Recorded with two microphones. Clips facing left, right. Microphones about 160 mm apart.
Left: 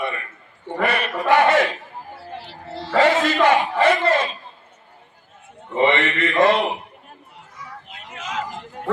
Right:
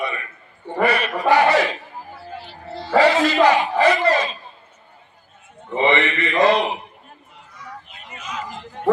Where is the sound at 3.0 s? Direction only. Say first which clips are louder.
Right 2 dB; 50° left (ahead or behind).